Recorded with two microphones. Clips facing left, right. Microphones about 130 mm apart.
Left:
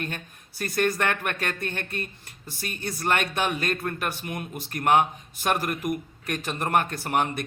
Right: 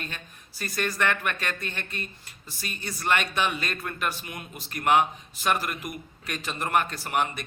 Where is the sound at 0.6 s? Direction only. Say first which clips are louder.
Left 3 dB; 55° left (ahead or behind).